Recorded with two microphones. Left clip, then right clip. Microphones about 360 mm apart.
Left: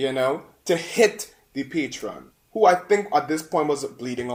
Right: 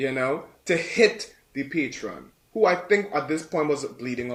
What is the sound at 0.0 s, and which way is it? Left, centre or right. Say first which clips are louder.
Speech: left 3 dB; left.